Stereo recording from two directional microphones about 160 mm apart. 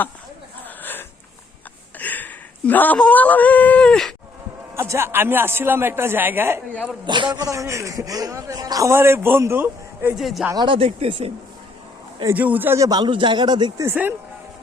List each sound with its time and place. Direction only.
0.8 s a sound: 10° left (ahead or behind)
4.7 s a man's voice: 15° right (ahead or behind)
7.0 s a man's voice: 30° right (ahead or behind)
10.2 s speech: centre (ahead or behind)
10.5 s speech: 30° right (ahead or behind)
12.3 s a man's voice: 10° right (ahead or behind); by 13.8 s 25° right (ahead or behind)
13.8 s a man's voice: 10° right (ahead or behind)